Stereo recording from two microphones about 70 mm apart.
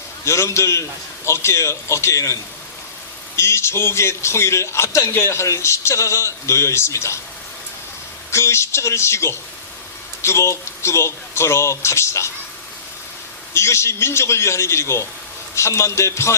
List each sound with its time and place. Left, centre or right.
0.3 s a man's voice: left
8.3 s speech: left
13.5 s a man's voice: left